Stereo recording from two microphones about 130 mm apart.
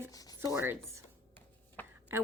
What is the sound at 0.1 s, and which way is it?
Chopping, 30° left (ahead or behind).